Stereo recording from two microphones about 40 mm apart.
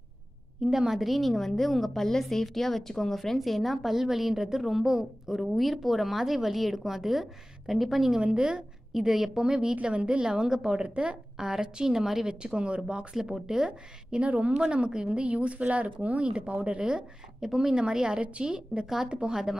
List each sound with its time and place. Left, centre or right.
0.7 s a woman's voice: centre
5.4 s a woman's voice: centre
8.2 s speech: right
8.9 s a woman's voice: centre
12.4 s speech: right
13.1 s a woman's voice: centre
13.7 s a woman's voice: right
14.6 s speech: right